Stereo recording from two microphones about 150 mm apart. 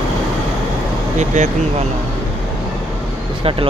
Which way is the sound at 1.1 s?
50° right (ahead or behind).